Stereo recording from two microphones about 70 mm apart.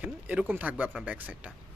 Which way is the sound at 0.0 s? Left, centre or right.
Centre.